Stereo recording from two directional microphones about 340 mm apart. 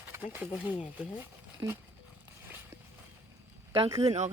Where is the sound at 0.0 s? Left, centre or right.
Centre.